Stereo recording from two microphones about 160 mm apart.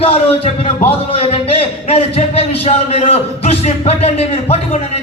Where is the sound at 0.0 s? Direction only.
40° left (ahead or behind).